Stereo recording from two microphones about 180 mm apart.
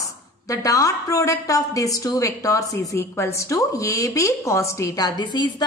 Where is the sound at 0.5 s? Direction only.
20° left (ahead or behind).